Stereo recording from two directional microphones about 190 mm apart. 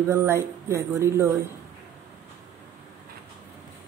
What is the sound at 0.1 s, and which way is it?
Speech, 15° right (ahead or behind).